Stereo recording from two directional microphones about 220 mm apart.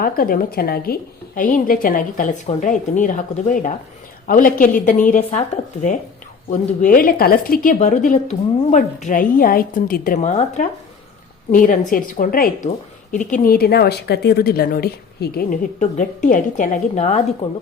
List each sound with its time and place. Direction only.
0.0 s a woman's voice: 40° left (ahead or behind)
6.5 s a woman's voice: 40° left (ahead or behind)